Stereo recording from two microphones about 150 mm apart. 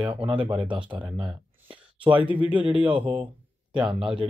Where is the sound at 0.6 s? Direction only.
35° right (ahead or behind).